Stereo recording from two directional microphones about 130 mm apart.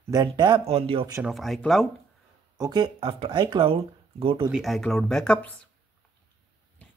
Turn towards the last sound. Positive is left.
turn(degrees=10)  # may be behind; listen again after turning